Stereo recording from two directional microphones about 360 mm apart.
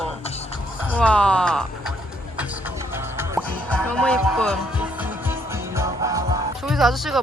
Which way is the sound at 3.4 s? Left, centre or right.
Centre.